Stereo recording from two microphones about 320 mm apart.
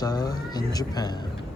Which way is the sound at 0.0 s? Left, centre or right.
Centre.